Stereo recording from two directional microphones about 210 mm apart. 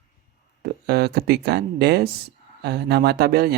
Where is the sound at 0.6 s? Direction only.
50° right (ahead or behind).